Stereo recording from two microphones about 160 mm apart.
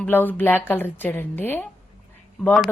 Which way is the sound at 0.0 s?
10° left (ahead or behind).